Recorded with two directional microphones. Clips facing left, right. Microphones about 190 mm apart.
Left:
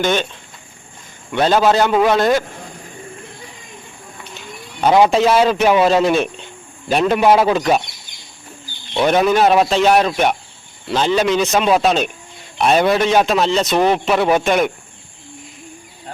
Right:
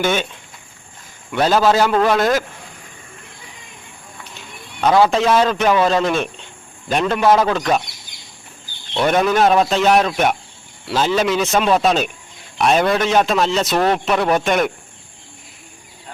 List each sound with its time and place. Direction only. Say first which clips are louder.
0.0 s speech: left 1 dB; 5° right (ahead or behind)
1.3 s a man's voice: left 1 dB; 5° right (ahead or behind)
4.8 s a man's voice: left 2 dB; 15° left (ahead or behind)
8.9 s a man's voice: left 2 dB; 5° left (ahead or behind)